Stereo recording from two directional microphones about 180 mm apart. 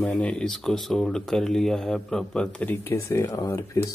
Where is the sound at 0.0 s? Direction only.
5° left (ahead or behind).